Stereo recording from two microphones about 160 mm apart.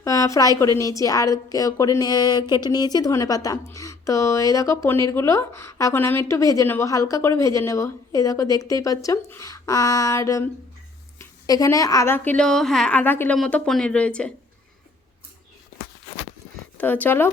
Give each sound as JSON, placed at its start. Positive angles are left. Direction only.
{"t": 0.0, "sound": "a woman's voice", "side_deg": 20}
{"t": 16.7, "sound": "speech", "side_deg": 10}